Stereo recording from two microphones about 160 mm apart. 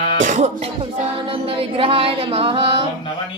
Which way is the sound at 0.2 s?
50° right (ahead or behind).